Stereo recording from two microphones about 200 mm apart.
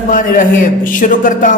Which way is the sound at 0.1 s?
40° left (ahead or behind).